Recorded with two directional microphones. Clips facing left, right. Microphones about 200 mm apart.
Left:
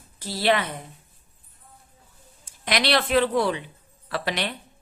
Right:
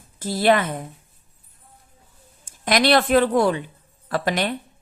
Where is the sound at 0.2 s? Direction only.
50° right (ahead or behind).